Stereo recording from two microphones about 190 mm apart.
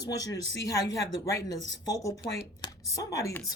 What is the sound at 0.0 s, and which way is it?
Speech, 20° left (ahead or behind).